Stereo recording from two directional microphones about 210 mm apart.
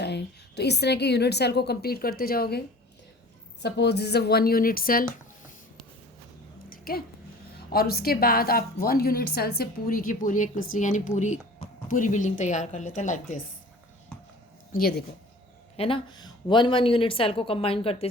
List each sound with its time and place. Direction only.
0.0 s a woman's voice: 50° left (ahead or behind)
6.7 s a sound: 45° left (ahead or behind)
7.7 s a woman's voice: 45° left (ahead or behind)
14.7 s speech: 45° left (ahead or behind)
15.8 s a woman's voice: 25° left (ahead or behind)